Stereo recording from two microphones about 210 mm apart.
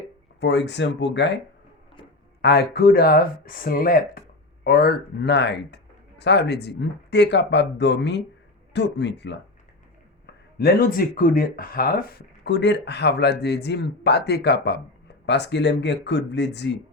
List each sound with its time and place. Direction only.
0.3 s speech: 55° left (ahead or behind)
2.4 s speech: 50° left (ahead or behind)
10.6 s speech: 45° left (ahead or behind)